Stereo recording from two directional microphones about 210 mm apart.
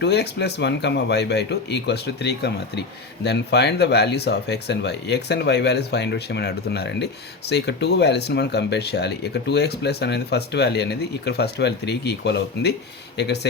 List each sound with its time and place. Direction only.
0.0 s speech: 55° left (ahead or behind)